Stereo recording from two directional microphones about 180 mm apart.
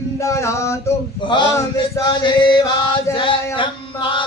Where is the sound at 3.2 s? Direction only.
25° left (ahead or behind).